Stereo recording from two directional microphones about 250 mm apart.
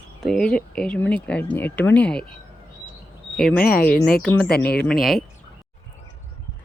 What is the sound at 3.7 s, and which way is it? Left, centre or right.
Speech, left.